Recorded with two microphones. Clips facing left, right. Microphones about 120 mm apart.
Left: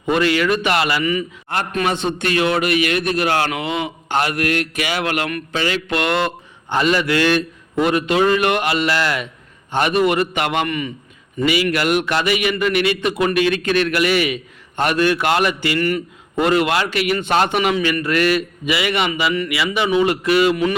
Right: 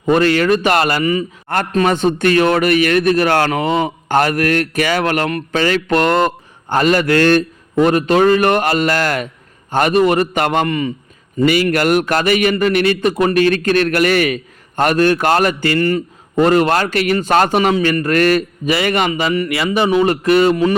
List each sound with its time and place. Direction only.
0.0 s a man's voice: 40° right (ahead or behind)
11.4 s a man's voice: 45° right (ahead or behind)